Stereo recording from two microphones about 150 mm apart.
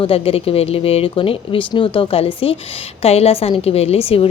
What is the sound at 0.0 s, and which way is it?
A woman's voice, 40° left (ahead or behind).